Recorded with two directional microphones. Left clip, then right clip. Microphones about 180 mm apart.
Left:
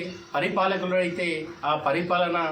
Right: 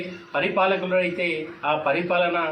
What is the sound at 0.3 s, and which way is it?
A man's voice, 15° left (ahead or behind).